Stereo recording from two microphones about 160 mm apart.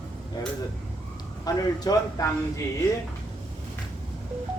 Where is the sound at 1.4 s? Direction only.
25° left (ahead or behind).